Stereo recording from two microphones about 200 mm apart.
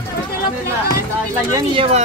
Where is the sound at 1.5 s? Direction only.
25° right (ahead or behind).